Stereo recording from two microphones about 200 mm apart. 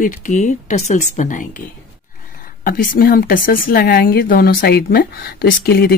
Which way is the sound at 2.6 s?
45° left (ahead or behind).